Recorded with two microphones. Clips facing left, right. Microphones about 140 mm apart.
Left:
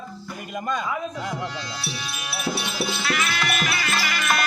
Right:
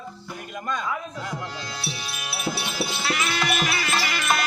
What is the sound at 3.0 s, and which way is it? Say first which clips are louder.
Music: right 2 dB; 25° right (ahead or behind).